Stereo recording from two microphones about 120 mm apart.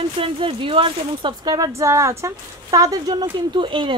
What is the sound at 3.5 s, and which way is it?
Speech, 45° right (ahead or behind).